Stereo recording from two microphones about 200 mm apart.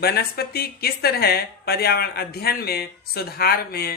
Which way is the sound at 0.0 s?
50° left (ahead or behind).